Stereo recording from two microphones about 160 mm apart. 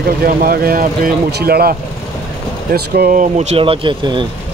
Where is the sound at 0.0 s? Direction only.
65° right (ahead or behind); by 4.3 s 30° right (ahead or behind).